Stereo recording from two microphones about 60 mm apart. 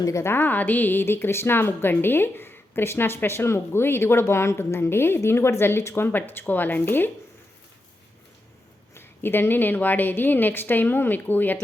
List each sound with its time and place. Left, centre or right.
0.0 s a woman's voice: left
0.3 s a woman's voice: left
9.0 s a woman's voice: left